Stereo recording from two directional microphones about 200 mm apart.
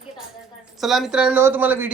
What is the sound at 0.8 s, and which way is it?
Speech, centre (ahead or behind).